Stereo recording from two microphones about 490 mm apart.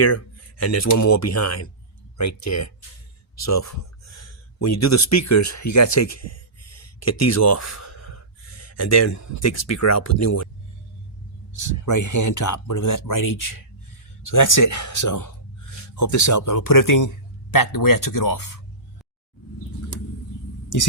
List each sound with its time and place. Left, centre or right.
0.6 s speech: left
11.5 s speech: left